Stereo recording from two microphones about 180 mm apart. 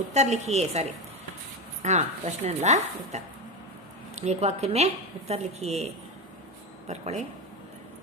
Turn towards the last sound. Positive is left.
turn(degrees=-40)  # may be behind; listen again after turning